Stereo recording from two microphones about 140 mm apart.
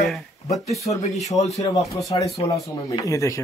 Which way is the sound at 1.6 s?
25° left (ahead or behind).